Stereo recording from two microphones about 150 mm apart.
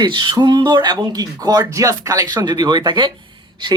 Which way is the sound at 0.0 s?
30° right (ahead or behind).